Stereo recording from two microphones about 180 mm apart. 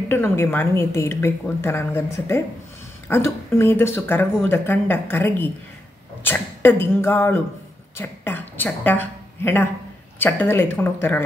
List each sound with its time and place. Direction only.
0.1 s a woman's voice: 15° left (ahead or behind)